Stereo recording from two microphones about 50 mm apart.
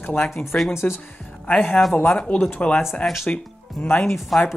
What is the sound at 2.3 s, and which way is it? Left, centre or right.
Speech, left.